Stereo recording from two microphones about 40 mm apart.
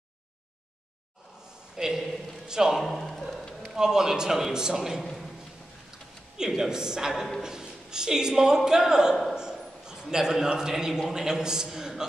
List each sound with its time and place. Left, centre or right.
1.8 s speech: centre
2.8 s a sound: centre
3.7 s a man's voice: centre
6.3 s a man's voice: centre